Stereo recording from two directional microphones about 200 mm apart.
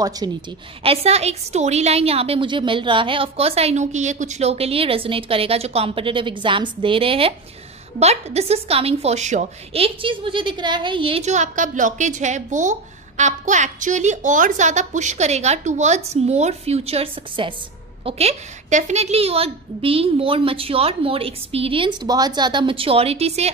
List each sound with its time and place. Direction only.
0.0 s a woman's voice: 20° right (ahead or behind)
0.8 s a woman's voice: 30° right (ahead or behind)